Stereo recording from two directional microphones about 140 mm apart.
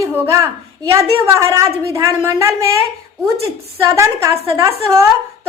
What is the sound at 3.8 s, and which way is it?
A woman's voice, 20° right (ahead or behind).